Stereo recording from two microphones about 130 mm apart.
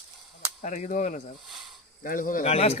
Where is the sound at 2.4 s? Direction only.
50° left (ahead or behind).